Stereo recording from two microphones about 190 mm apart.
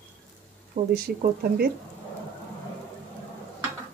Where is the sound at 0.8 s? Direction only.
50° right (ahead or behind).